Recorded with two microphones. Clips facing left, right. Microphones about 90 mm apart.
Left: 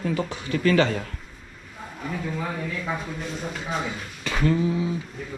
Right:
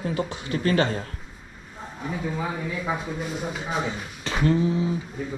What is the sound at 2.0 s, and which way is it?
Speech, 15° right (ahead or behind).